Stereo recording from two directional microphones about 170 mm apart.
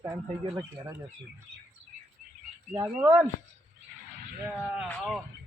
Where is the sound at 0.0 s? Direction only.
20° right (ahead or behind).